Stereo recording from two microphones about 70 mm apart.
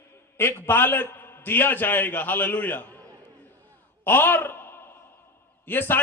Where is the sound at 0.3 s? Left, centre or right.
Left.